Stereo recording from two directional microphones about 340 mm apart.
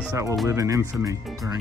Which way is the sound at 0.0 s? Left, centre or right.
Centre.